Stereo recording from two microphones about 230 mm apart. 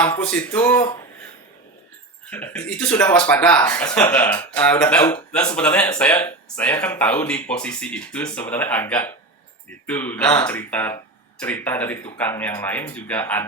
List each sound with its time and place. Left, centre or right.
0.0 s speech: centre
2.3 s speech: centre
5.3 s speech: centre